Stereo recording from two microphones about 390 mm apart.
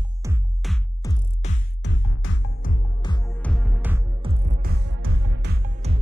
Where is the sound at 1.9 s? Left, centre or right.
Left; by 6.0 s centre.